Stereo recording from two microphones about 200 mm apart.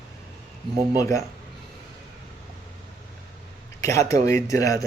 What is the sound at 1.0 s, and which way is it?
Speech, 15° left (ahead or behind).